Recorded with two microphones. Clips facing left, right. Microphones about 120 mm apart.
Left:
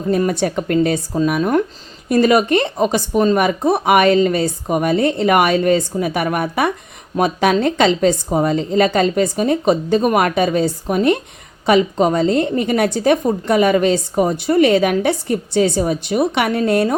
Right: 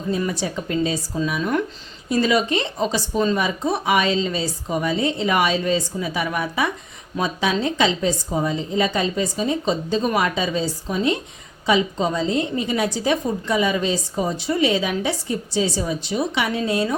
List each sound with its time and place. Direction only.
0.1 s a woman's voice: 60° left (ahead or behind)
1.1 s a woman's voice: 45° left (ahead or behind)